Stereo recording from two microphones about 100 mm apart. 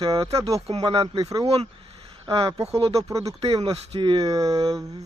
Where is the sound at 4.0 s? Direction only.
55° right (ahead or behind).